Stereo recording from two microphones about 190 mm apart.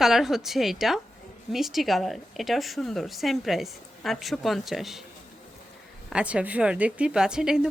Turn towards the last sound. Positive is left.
turn(degrees=-5)  # may be behind; listen again after turning